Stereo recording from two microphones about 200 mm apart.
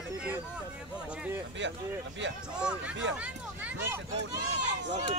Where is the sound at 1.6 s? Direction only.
65° right (ahead or behind).